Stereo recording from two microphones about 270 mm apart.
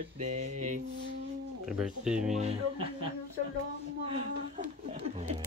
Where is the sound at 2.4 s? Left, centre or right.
Right.